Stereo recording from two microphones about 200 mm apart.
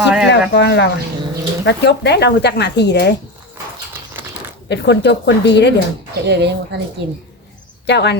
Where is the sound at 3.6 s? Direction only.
10° right (ahead or behind).